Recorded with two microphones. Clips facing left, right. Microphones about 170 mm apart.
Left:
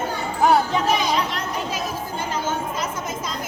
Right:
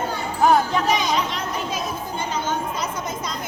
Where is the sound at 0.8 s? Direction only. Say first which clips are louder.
Even; centre (ahead or behind).